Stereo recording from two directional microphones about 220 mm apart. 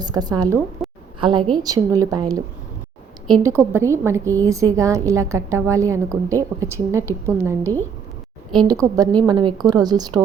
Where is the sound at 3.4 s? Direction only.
10° right (ahead or behind).